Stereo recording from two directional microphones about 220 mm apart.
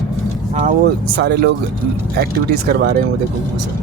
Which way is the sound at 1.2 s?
50° right (ahead or behind).